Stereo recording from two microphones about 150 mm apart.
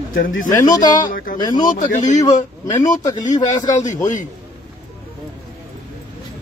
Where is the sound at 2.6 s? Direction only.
25° left (ahead or behind).